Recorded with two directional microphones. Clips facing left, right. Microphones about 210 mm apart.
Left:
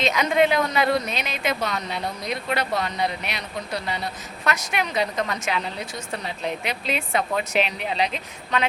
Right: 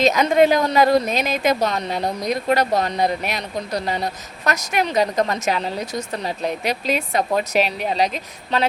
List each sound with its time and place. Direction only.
0.0 s speech: 40° right (ahead or behind)